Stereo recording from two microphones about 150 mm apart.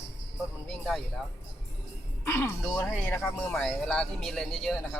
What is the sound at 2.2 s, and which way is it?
Speech, 15° left (ahead or behind).